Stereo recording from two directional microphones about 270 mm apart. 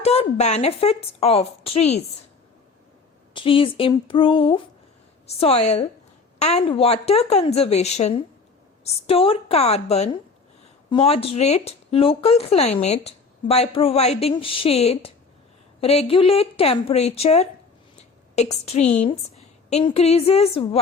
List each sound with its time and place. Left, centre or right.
0.0 s speech: left
3.3 s speech: centre
17.9 s a sound: left
19.7 s speech: left